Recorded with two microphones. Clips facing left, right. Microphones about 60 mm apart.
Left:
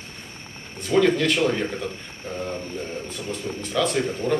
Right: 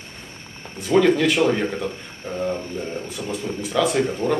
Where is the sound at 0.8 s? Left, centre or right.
Centre.